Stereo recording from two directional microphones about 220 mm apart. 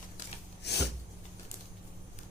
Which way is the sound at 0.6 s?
50° left (ahead or behind).